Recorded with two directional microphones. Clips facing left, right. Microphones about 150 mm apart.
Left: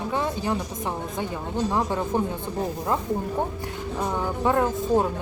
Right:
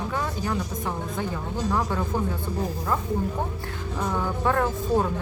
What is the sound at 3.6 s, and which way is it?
Speech, 15° left (ahead or behind).